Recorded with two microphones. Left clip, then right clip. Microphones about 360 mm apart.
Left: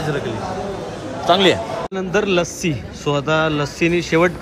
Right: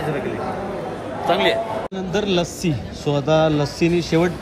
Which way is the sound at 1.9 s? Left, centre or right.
Centre.